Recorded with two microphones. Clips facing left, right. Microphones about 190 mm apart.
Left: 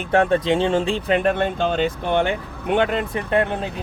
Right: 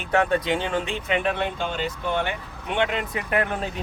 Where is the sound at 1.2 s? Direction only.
50° left (ahead or behind).